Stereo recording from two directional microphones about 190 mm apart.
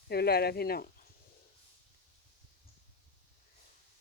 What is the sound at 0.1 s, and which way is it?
Speech, 55° left (ahead or behind).